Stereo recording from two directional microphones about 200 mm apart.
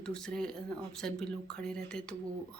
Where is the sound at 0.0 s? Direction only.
5° left (ahead or behind).